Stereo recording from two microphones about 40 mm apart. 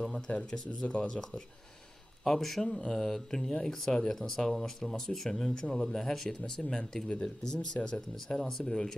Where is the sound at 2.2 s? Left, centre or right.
Centre.